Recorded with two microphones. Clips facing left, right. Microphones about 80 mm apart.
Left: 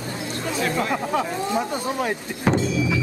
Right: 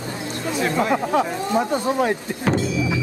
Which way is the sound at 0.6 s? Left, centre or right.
Right.